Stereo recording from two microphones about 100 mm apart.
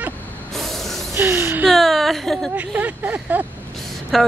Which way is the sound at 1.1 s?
25° right (ahead or behind).